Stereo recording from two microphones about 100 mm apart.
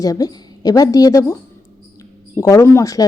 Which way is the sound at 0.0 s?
40° left (ahead or behind).